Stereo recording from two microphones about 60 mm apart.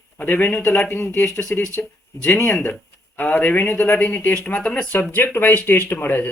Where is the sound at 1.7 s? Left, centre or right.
Left.